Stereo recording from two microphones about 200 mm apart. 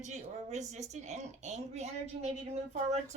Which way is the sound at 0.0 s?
35° right (ahead or behind).